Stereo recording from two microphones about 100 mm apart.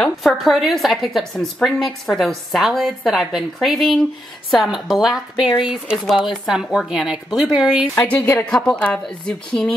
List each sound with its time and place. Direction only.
0.0 s a woman's voice: 5° left (ahead or behind)
8.1 s a woman's voice: 15° left (ahead or behind)